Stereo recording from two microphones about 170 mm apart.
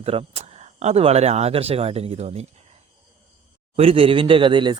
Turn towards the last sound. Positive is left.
turn(degrees=-25)  # may be behind; listen again after turning